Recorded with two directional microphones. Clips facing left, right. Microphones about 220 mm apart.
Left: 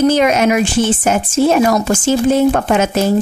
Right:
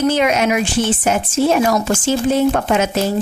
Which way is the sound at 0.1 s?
45° left (ahead or behind).